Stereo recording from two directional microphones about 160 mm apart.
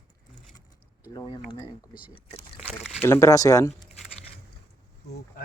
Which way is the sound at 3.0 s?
15° left (ahead or behind).